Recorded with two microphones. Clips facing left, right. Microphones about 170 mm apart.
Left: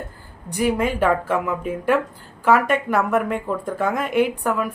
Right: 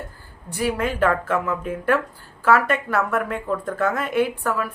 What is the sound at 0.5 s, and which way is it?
A woman's voice, 15° left (ahead or behind).